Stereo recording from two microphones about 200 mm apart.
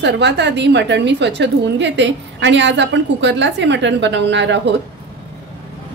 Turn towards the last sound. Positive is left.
turn(degrees=-65)  # may be behind; listen again after turning